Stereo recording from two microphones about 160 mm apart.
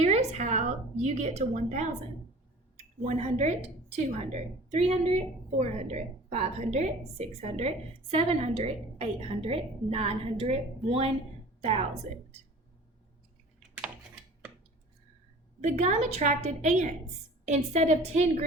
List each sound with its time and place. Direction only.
0.0 s a sound: 45° right (ahead or behind)
2.7 s a woman's voice: 45° right (ahead or behind)
15.6 s a woman's voice: 45° right (ahead or behind)